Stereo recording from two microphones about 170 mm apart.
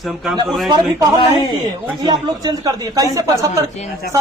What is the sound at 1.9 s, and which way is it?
Speech, 25° right (ahead or behind).